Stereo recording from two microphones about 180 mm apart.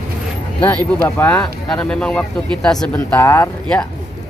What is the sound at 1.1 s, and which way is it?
Speech, 15° left (ahead or behind).